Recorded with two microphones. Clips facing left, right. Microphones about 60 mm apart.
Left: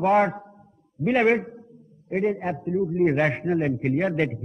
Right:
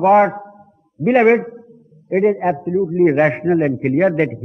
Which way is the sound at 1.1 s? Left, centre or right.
Right.